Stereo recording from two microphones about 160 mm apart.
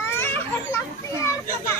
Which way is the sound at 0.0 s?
15° left (ahead or behind).